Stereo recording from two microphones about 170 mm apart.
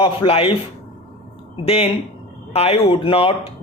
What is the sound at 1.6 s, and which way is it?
Speech, 35° left (ahead or behind).